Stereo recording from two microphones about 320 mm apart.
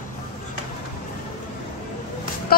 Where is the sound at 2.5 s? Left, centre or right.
Left.